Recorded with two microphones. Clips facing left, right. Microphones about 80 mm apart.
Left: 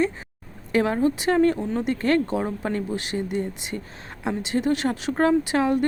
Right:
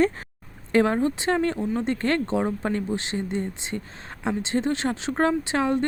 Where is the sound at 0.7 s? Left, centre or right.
Right.